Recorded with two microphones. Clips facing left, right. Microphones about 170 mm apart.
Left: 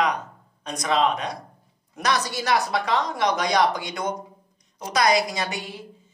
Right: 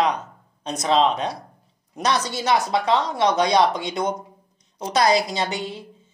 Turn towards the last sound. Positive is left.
turn(degrees=-20)  # may be behind; listen again after turning